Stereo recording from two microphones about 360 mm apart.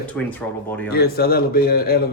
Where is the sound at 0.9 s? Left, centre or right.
Left.